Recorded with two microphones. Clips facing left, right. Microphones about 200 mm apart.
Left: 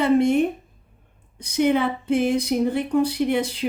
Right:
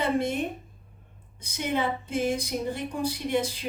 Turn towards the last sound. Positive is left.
turn(degrees=65)  # may be behind; listen again after turning